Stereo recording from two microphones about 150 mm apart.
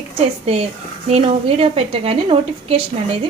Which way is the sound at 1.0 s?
45° right (ahead or behind).